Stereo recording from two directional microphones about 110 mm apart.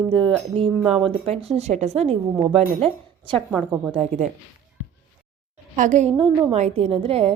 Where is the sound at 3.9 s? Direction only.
85° right.